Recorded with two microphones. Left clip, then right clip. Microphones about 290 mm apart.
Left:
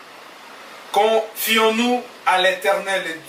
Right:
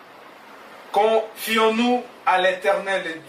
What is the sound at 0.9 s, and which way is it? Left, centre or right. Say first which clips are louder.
Speech: left 2 dB; centre.